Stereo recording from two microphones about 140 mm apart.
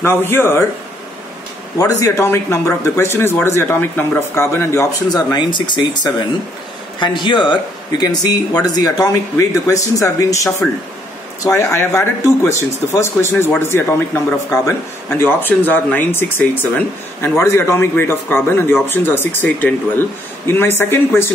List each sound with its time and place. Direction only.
0.0 s speech: 15° left (ahead or behind)
1.8 s a man's voice: 25° left (ahead or behind)